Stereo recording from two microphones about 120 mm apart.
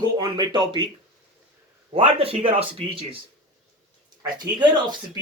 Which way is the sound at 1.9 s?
50° right (ahead or behind).